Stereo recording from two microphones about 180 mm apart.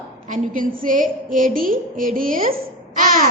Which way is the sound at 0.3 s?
50° right (ahead or behind).